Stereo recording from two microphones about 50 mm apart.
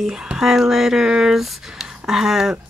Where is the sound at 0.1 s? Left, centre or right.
Centre.